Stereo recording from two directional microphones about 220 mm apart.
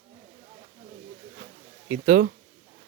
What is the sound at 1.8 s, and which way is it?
Speech, 35° right (ahead or behind).